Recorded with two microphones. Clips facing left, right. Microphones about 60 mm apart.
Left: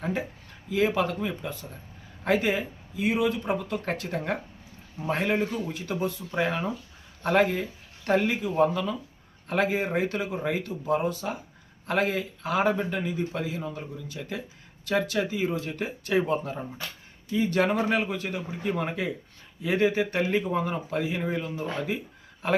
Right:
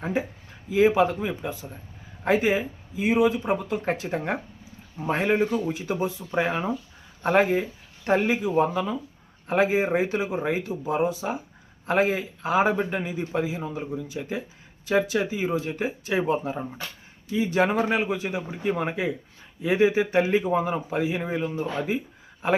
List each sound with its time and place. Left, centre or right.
0.0 s speech: centre